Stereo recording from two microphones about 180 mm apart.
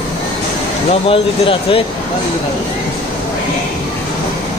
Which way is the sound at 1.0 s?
30° left (ahead or behind).